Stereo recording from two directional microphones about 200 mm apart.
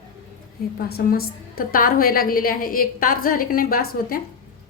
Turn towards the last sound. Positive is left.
turn(degrees=45)  # may be behind; listen again after turning